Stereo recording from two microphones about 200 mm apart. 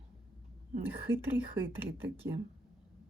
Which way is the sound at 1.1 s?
70° right (ahead or behind).